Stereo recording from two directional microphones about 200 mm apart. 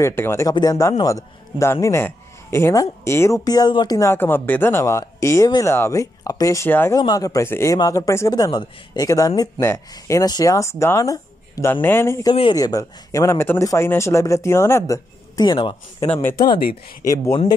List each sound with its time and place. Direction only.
0.0 s speech: 10° left (ahead or behind)
16.1 s speech: 10° left (ahead or behind)